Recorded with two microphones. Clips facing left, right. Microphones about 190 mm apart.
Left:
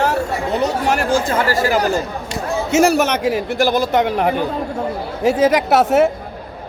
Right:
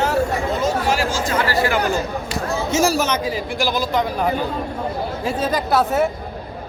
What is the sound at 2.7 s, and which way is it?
A man's voice, 65° left (ahead or behind).